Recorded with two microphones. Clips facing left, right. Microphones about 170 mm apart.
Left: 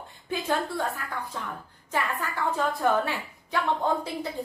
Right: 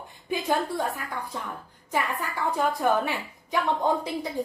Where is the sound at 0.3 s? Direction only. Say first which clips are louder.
Right 2 dB; 15° right (ahead or behind).